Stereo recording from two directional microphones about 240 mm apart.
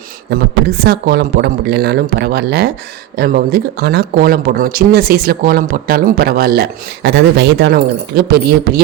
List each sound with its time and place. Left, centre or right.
0.3 s speech: right